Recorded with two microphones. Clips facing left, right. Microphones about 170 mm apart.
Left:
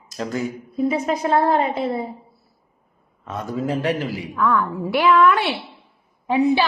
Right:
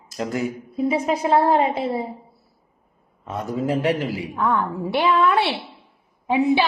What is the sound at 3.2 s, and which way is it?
A child's voice, 25° right (ahead or behind).